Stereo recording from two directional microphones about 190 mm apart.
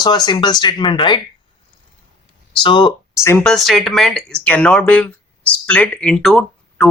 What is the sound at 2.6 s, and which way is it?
Speech, 25° left (ahead or behind).